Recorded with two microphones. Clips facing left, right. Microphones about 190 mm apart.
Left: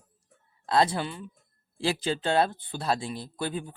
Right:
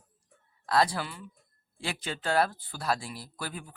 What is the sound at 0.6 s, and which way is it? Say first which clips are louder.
Speech: left 2 dB; 25° left (ahead or behind).